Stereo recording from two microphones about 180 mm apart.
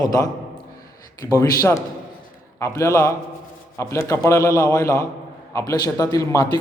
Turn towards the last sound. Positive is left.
turn(degrees=20)  # may be behind; listen again after turning